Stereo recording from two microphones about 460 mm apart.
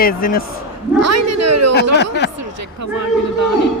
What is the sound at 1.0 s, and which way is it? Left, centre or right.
Speech, right.